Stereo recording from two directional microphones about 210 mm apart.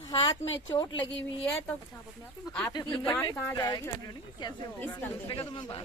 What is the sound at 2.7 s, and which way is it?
Speech, 20° left (ahead or behind).